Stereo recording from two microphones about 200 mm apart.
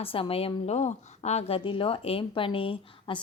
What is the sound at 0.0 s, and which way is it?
A woman's voice, 30° left (ahead or behind).